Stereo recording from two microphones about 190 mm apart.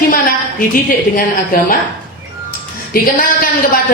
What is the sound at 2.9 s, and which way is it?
Speech, 50° left (ahead or behind).